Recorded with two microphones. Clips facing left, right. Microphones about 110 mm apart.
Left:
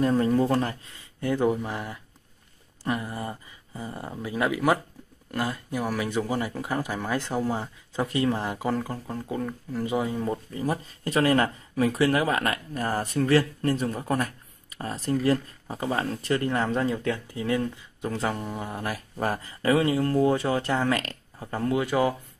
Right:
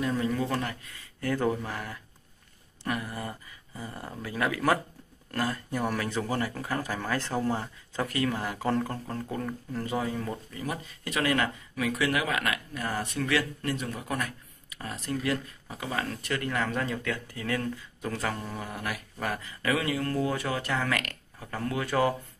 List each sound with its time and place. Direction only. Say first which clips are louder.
0.0 s speech: left 6 dB; 40° left (ahead or behind); by 2.0 s 20° left (ahead or behind)
2.9 s a sound: left 3 dB; 25° left (ahead or behind)
4.1 s speech: left 3 dB; 20° left (ahead or behind)
8.6 s speech: right 3 dB; 10° left (ahead or behind)
10.5 s speech: left 6 dB; 30° left (ahead or behind); by 22.1 s 15° left (ahead or behind)